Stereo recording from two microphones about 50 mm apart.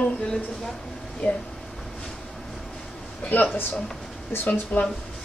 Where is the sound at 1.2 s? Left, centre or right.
Centre.